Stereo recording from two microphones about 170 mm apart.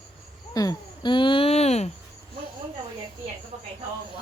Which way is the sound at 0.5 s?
20° left (ahead or behind).